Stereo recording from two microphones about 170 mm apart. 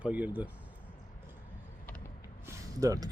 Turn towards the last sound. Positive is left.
turn(degrees=-20)  # may be behind; listen again after turning